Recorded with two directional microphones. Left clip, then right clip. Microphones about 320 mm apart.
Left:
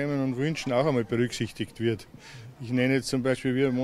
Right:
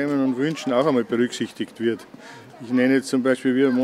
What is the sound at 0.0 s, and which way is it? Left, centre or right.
Speech, left.